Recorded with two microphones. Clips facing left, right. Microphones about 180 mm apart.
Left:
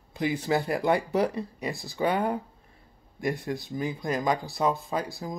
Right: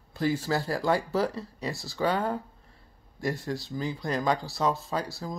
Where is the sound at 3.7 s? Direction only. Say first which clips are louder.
Left 2 dB; 20° left (ahead or behind).